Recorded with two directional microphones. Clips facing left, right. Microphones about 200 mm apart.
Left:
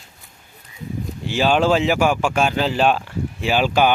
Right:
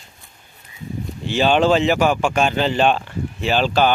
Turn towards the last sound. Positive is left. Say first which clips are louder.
# even
turn(degrees=10)  # may be behind; listen again after turning